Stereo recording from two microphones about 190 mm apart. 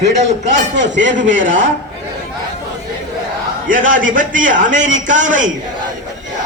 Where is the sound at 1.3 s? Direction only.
80° right.